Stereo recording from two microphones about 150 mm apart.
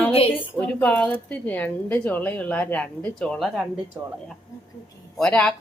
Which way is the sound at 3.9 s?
20° right (ahead or behind).